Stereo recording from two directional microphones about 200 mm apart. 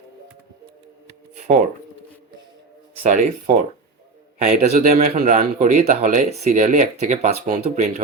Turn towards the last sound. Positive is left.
turn(degrees=-40)  # may be behind; listen again after turning